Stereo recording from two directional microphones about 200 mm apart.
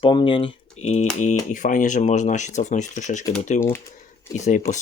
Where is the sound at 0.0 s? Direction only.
25° left (ahead or behind).